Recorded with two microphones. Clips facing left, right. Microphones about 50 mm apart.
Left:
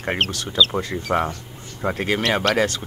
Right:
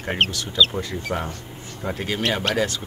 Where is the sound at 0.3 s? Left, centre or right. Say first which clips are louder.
Left 1 dB; left.